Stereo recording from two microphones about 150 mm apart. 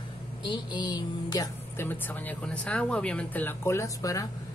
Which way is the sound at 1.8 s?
10° left (ahead or behind).